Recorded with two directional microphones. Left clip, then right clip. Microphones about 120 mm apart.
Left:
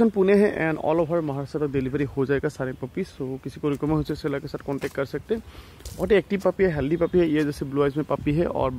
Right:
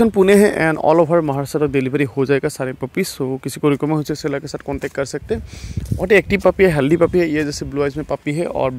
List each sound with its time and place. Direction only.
0.1 s speech: 40° right (ahead or behind)
0.9 s speech: 55° right (ahead or behind)
1.6 s speech: 30° right (ahead or behind)
3.0 s speech: 50° right (ahead or behind)
3.8 s speech: 30° right (ahead or behind)
5.9 s speech: 20° right (ahead or behind)
6.8 s speech: 50° right (ahead or behind)
7.2 s speech: 5° right (ahead or behind)